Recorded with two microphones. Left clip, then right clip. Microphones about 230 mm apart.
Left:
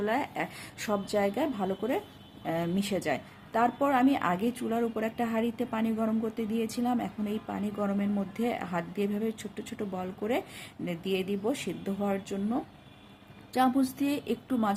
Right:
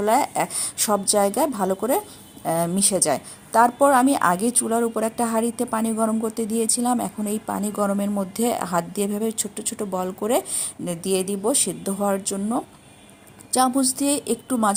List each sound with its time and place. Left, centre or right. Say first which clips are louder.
0.0 s a woman's voice: right 10 dB; right